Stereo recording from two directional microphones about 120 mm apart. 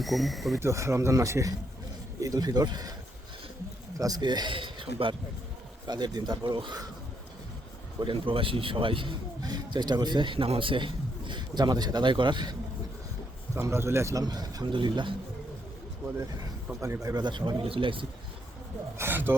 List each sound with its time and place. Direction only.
0.0 s speech: centre (ahead or behind)
0.6 s speech: 25° right (ahead or behind)
3.9 s a man's voice: 30° right (ahead or behind)
5.8 s speech: 35° right (ahead or behind)
8.0 s a man's voice: 45° right (ahead or behind)
13.6 s speech: 20° right (ahead or behind); by 15.1 s 40° right (ahead or behind)
16.8 s speech: 25° right (ahead or behind); by 18.0 s 45° right (ahead or behind)
18.9 s speech: 20° right (ahead or behind)